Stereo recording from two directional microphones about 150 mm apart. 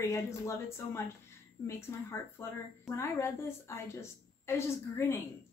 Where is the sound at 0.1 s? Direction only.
20° left (ahead or behind).